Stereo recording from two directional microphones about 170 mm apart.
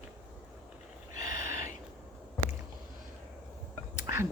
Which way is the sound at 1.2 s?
20° right (ahead or behind).